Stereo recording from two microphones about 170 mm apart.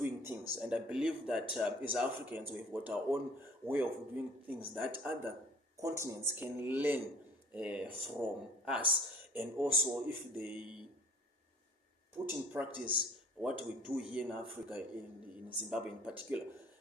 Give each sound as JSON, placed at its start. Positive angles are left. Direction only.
{"t": 0.0, "sound": "a sound", "side_deg": -15}
{"t": 1.3, "sound": "speech", "side_deg": 0}
{"t": 12.2, "sound": "speech", "side_deg": -10}
{"t": 15.4, "sound": "speech", "side_deg": -5}